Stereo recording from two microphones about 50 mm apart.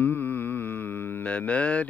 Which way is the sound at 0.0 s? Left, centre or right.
Left.